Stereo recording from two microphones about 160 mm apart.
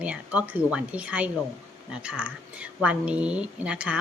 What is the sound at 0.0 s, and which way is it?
A woman's voice, 10° right (ahead or behind).